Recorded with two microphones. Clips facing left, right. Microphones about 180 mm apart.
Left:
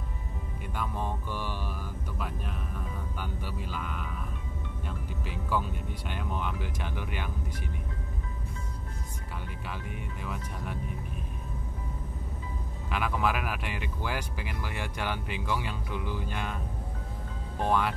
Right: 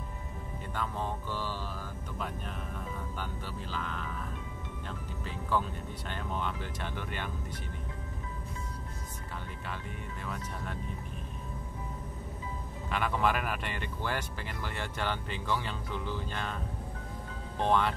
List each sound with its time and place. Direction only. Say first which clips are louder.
0.7 s speech: left 1 dB; 15° left (ahead or behind)
2.1 s speech: even; 5° left (ahead or behind)
10.2 s speech: left 1 dB; 10° left (ahead or behind)
12.9 s speech: even; 5° left (ahead or behind)
17.6 s speech: even; 10° left (ahead or behind)